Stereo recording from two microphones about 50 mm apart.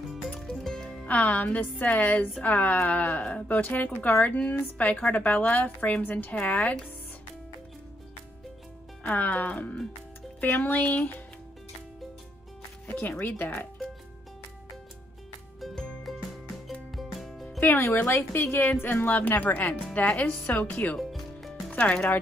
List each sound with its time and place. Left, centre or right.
0.4 s music: centre
1.0 s speech: left
9.0 s speech: left
12.8 s music: left
13.4 s speech: left
15.7 s music: centre
16.9 s music: centre
17.6 s a woman's voice: left
21.1 s music: centre
21.7 s speech: left